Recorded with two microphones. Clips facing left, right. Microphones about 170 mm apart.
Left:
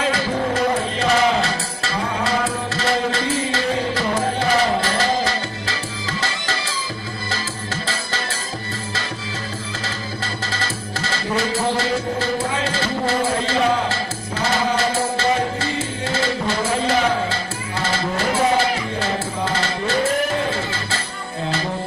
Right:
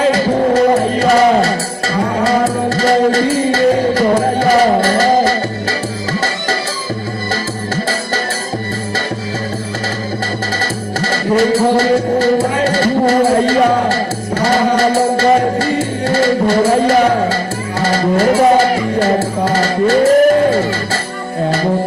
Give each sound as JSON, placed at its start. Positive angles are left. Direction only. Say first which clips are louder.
{"t": 1.0, "sound": "music", "louder": "right 7 dB", "side_deg": -40}
{"t": 10.6, "sound": "music", "louder": "right 8 dB", "side_deg": -50}